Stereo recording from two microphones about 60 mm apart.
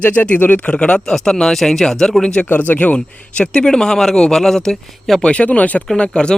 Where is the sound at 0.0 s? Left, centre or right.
Left.